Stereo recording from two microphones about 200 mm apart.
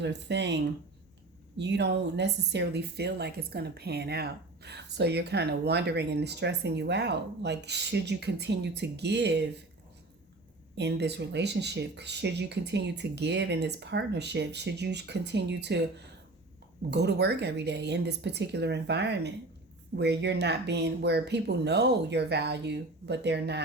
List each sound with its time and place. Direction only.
0.0 s speech: 60° right (ahead or behind)
10.8 s speech: 60° right (ahead or behind)
16.9 s speech: 55° right (ahead or behind)